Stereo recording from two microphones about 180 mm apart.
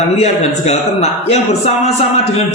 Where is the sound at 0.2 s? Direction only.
35° left (ahead or behind).